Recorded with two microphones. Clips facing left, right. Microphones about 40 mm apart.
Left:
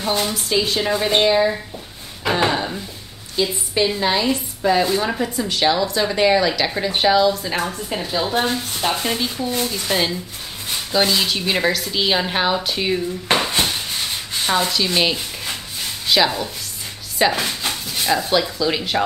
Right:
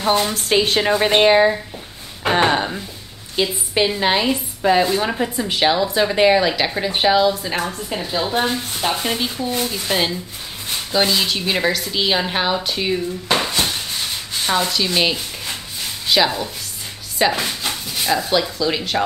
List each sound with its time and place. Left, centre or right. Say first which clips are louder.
0.5 s a woman's voice: right 4 dB; right
2.2 s a woman's voice: right 2 dB; right; by 13.0 s centre
13.3 s dishes: left 1 dB; left
13.7 s rub: even; centre
15.1 s a sound: even; centre
17.2 s speech: even; centre